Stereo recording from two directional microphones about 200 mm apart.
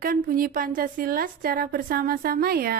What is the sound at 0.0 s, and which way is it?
A woman's voice, 45° right (ahead or behind).